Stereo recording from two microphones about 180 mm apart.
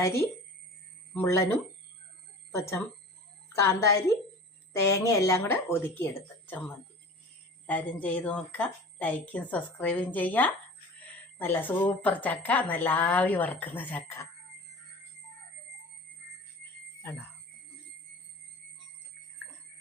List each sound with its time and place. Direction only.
0.0 s speech: 15° left (ahead or behind)